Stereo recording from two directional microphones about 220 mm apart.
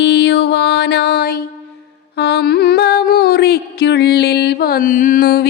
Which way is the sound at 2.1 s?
50° left (ahead or behind).